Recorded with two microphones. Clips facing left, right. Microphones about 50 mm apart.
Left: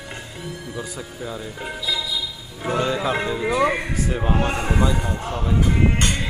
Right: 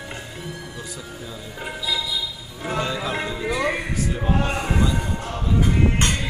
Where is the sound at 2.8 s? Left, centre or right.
Centre.